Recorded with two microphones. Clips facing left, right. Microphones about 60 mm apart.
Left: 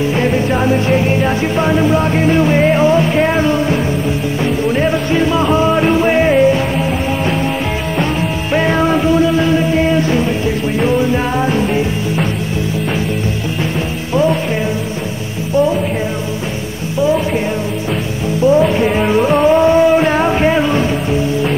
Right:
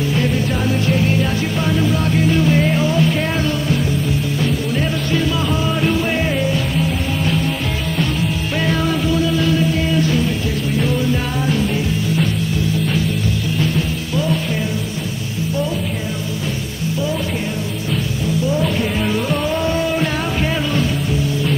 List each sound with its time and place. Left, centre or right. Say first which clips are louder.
0.1 s music: left 5 dB; left
8.5 s music: left 7 dB; left
18.4 s music: left 10 dB; left